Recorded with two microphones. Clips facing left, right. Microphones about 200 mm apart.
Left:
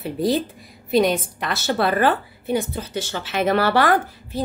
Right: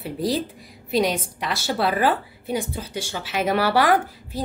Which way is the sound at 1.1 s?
10° right (ahead or behind).